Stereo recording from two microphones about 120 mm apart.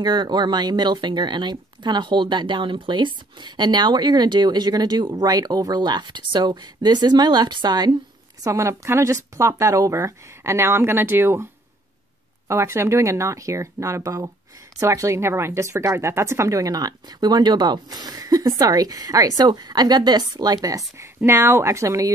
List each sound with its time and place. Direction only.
0.0 s speech: 35° right (ahead or behind)
8.5 s speech: 25° right (ahead or behind)
12.4 s speech: 20° right (ahead or behind)